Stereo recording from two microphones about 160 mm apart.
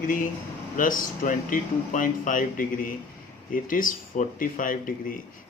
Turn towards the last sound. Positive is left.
turn(degrees=60)  # may be behind; listen again after turning